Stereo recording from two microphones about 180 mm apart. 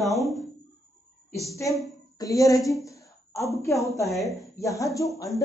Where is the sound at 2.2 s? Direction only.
20° left (ahead or behind).